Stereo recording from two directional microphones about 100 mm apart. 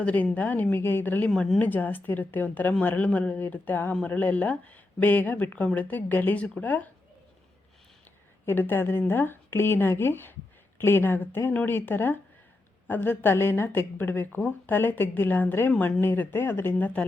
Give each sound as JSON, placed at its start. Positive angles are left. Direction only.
{"t": 0.0, "sound": "speech", "side_deg": 15}
{"t": 1.3, "sound": "speech", "side_deg": 0}
{"t": 1.5, "sound": "speech", "side_deg": 15}
{"t": 8.4, "sound": "a woman's voice", "side_deg": 20}